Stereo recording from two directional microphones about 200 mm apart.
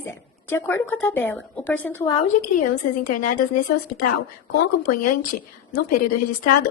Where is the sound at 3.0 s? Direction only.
45° left (ahead or behind).